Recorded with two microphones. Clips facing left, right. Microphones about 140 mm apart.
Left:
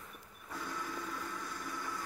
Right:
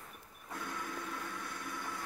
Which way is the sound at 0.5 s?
55° right (ahead or behind).